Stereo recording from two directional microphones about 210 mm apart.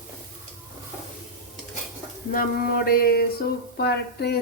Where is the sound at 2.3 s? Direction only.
45° left (ahead or behind).